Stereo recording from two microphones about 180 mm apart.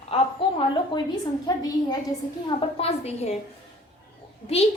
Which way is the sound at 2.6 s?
35° left (ahead or behind).